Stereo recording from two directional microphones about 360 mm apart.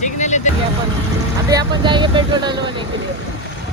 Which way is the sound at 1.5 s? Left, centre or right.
Centre.